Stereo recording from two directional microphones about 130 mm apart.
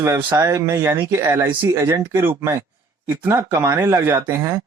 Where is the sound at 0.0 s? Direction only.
20° right (ahead or behind).